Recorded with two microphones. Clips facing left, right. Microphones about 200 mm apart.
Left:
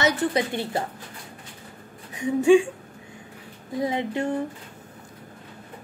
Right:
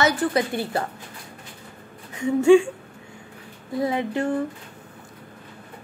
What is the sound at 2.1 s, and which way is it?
Speech, 15° left (ahead or behind).